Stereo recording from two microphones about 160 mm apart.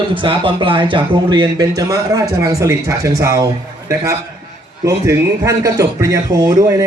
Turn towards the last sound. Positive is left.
turn(degrees=-20)  # may be behind; listen again after turning